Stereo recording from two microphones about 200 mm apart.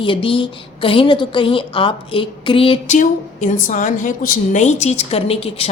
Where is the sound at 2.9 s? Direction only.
40° left (ahead or behind).